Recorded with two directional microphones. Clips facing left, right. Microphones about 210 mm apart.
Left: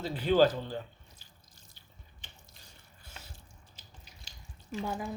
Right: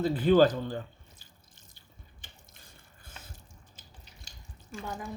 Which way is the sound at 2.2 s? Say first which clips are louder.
Left 2 dB; 50° right (ahead or behind).